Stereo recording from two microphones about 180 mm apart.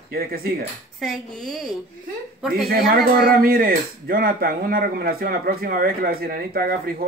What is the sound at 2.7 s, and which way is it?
Speech, 55° right (ahead or behind).